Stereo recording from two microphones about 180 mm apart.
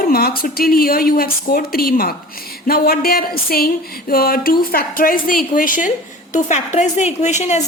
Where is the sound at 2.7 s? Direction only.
55° left (ahead or behind).